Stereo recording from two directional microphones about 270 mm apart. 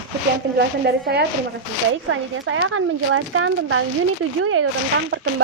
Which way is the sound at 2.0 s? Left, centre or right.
Right.